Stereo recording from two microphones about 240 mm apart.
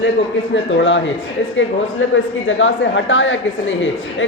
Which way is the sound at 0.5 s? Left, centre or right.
Left.